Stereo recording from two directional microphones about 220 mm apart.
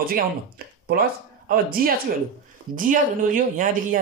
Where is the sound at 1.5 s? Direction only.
40° right (ahead or behind).